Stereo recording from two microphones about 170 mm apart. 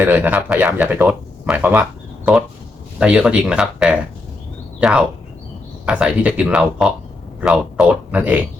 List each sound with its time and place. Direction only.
0.0 s speech: 10° right (ahead or behind)
3.0 s speech: 5° right (ahead or behind)